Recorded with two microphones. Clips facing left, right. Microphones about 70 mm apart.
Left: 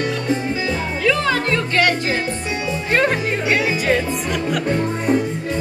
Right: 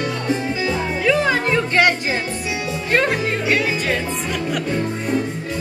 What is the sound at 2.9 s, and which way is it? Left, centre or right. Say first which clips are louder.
Music: even; centre.